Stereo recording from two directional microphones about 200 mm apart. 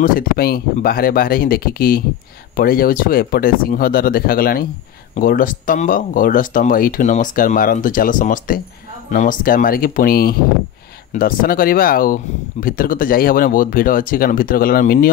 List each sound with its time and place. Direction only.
0.0 s speech: 45° left (ahead or behind)